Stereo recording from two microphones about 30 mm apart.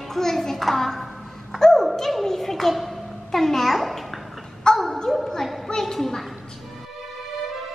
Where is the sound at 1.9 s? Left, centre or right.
Centre.